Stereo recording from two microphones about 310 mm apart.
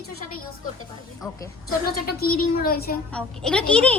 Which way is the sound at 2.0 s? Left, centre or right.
Left.